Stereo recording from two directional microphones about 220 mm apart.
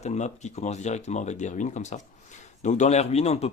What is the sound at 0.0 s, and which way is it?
Speech, 30° left (ahead or behind).